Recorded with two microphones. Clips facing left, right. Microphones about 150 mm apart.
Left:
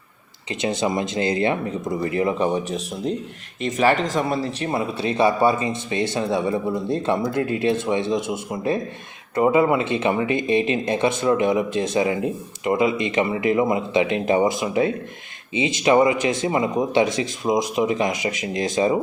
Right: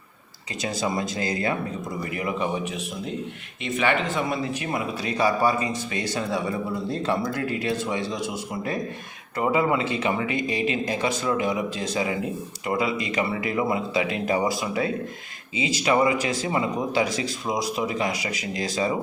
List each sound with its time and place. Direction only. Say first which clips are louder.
0.6 s speech: left 4 dB; 25° left (ahead or behind)